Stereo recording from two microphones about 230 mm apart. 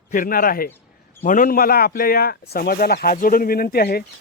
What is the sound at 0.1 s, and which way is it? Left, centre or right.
A man's voice, left.